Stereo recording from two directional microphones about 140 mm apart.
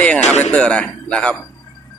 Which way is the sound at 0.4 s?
10° left (ahead or behind).